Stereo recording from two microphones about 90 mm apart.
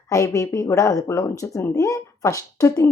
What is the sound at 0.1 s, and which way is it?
A woman's voice, 35° left (ahead or behind).